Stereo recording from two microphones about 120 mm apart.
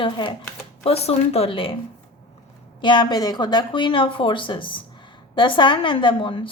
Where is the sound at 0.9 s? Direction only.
60° left (ahead or behind).